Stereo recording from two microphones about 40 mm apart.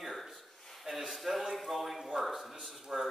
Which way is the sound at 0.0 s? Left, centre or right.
Centre.